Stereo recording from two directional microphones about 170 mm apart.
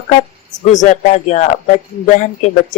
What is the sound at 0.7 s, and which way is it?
Speech, 45° left (ahead or behind).